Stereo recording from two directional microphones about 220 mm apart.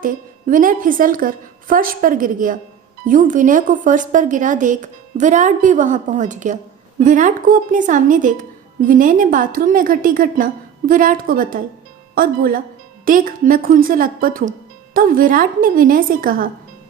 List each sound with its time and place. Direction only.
0.0 s a woman's voice: 40° right (ahead or behind)